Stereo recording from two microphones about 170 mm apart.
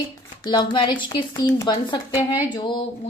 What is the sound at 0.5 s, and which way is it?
A woman's voice, 25° left (ahead or behind).